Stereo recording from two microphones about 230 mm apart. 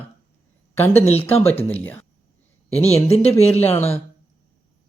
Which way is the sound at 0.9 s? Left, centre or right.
Left.